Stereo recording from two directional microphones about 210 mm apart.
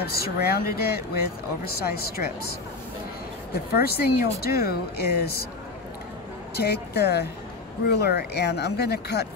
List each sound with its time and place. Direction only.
0.0 s speech: 50° left (ahead or behind)
3.7 s speech: 50° left (ahead or behind)
6.5 s speech: 50° left (ahead or behind)